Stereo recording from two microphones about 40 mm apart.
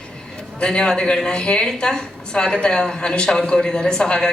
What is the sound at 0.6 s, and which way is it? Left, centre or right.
A woman's voice, left.